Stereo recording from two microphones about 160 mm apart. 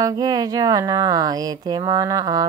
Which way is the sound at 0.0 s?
25° right (ahead or behind).